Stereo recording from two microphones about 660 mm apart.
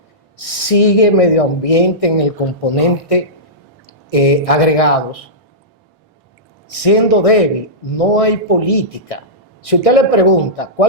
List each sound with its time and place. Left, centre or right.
0.3 s a man's voice: left
6.7 s a man's voice: left